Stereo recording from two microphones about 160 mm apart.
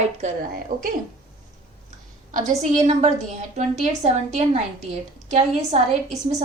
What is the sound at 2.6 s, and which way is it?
A woman's voice, 45° right (ahead or behind).